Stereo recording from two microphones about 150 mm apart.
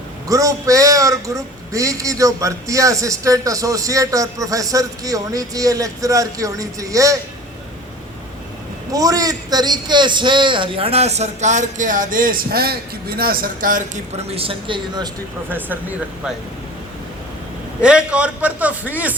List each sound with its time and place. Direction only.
0.3 s a man's voice: 20° right (ahead or behind)
8.9 s a man's voice: 25° right (ahead or behind); by 14.0 s 60° right (ahead or behind)
14.2 s speech: 40° right (ahead or behind)
15.4 s a man's voice: 15° right (ahead or behind)
17.7 s a man's voice: 5° right (ahead or behind)